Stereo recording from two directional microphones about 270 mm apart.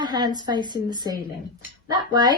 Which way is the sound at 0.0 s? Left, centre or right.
Centre.